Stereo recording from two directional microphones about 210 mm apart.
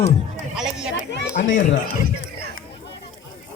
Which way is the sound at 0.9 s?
55° left (ahead or behind).